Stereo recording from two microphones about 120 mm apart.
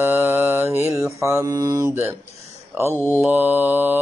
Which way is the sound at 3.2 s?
15° right (ahead or behind).